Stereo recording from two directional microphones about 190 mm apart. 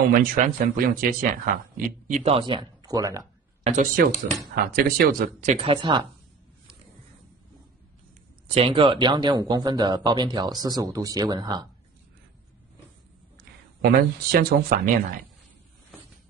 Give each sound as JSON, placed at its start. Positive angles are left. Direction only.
{"t": 0.1, "sound": "speech", "side_deg": -50}
{"t": 2.0, "sound": "speech", "side_deg": -35}
{"t": 3.6, "sound": "speech", "side_deg": -45}
{"t": 8.5, "sound": "speech", "side_deg": -30}
{"t": 13.8, "sound": "speech", "side_deg": -55}